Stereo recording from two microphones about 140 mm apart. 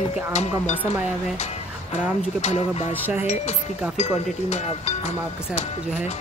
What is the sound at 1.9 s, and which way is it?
Speech, 55° left (ahead or behind).